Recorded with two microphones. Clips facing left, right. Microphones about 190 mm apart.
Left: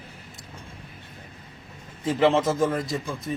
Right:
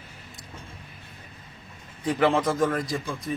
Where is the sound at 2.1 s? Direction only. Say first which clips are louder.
Left 2 dB; 25° left (ahead or behind).